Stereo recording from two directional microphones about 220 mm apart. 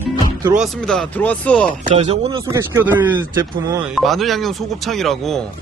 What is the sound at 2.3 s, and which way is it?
Speech, 15° right (ahead or behind).